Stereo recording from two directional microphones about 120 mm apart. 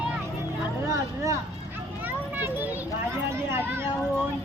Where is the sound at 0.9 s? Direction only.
25° right (ahead or behind).